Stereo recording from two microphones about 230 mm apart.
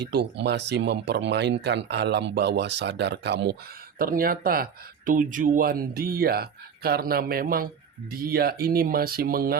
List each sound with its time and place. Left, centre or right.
0.0 s speech: right